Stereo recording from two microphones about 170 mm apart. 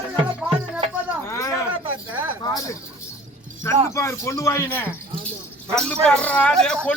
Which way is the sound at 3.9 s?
15° left (ahead or behind).